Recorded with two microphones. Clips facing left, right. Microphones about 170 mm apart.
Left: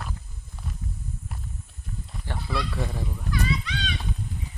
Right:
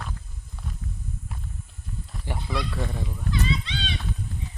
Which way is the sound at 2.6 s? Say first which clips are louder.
Even; centre (ahead or behind).